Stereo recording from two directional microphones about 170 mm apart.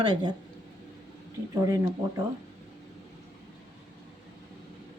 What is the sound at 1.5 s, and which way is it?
Speech, 20° right (ahead or behind).